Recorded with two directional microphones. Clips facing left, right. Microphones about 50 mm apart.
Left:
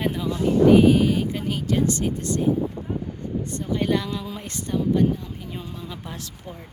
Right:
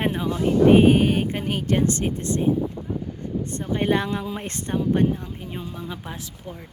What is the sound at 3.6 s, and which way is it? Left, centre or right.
A woman's voice, right.